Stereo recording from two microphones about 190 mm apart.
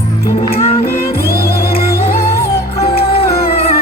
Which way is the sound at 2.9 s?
55° left (ahead or behind).